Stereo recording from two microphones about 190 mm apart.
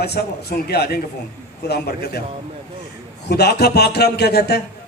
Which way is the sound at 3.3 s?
60° left (ahead or behind).